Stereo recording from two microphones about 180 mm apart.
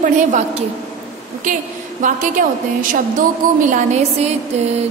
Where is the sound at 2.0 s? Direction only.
45° right (ahead or behind).